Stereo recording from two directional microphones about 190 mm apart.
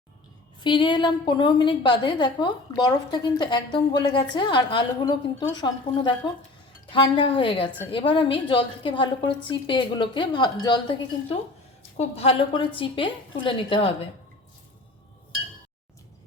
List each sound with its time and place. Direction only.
0.6 s a woman's voice: 25° left (ahead or behind)